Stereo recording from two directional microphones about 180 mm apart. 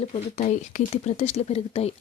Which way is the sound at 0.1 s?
40° left (ahead or behind).